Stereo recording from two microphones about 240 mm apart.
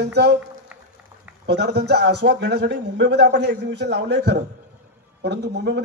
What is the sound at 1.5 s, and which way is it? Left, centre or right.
Speech, right.